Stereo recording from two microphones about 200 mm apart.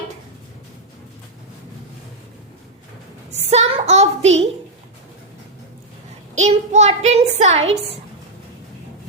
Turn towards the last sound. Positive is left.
turn(degrees=-30)  # may be behind; listen again after turning